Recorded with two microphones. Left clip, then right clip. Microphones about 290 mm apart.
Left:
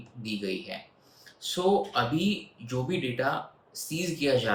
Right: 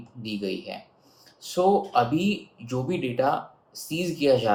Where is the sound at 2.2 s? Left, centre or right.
Left.